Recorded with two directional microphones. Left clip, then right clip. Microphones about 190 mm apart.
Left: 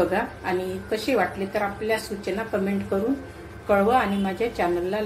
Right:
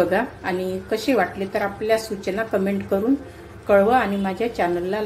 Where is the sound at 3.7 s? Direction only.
15° right (ahead or behind).